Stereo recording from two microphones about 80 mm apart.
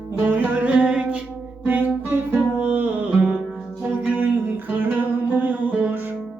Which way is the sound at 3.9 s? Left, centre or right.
Right.